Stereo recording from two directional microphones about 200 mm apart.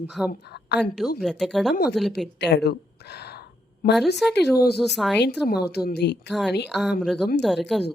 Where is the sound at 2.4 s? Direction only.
55° left (ahead or behind).